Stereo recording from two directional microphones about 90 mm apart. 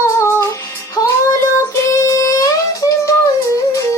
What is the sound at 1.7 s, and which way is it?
Child singing, 35° left (ahead or behind).